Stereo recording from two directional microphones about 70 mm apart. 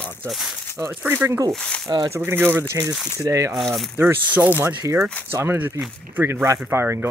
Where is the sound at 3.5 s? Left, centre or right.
Centre.